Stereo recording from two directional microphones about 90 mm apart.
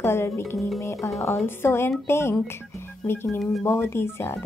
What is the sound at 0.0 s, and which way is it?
Speech, 30° left (ahead or behind).